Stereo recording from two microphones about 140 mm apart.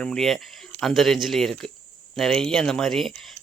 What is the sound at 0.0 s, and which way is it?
Speech, 5° left (ahead or behind).